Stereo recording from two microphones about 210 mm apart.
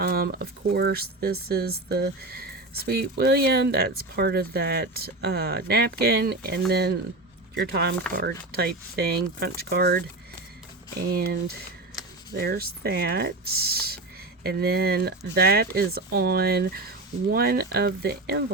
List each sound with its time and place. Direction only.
0.0 s speech: 45° right (ahead or behind)
11.1 s speech: 45° right (ahead or behind)